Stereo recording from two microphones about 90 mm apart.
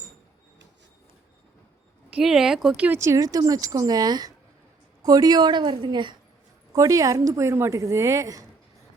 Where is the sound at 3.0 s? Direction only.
35° right (ahead or behind); by 6.1 s 60° right (ahead or behind).